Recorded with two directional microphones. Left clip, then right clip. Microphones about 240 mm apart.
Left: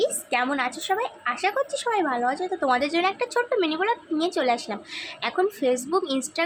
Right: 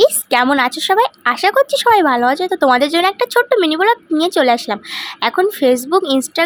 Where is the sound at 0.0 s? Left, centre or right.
Right.